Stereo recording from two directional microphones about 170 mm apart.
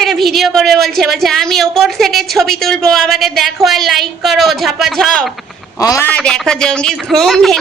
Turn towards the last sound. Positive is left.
turn(degrees=0)  # may be behind; listen again after turning